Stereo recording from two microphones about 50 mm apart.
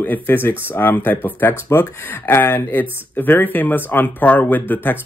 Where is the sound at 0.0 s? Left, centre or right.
Left.